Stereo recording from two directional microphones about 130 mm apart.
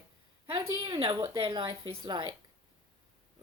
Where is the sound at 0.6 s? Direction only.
20° right (ahead or behind).